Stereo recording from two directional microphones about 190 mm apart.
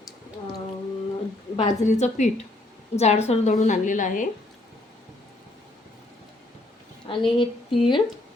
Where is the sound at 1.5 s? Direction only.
35° left (ahead or behind).